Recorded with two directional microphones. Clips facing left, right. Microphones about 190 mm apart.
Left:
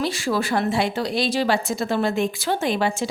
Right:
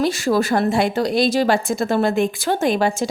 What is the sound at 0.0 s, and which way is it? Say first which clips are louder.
A woman's voice: right 5 dB; 45° right (ahead or behind).